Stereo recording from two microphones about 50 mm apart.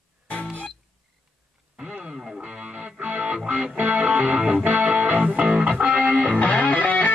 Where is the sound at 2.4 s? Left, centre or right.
Centre.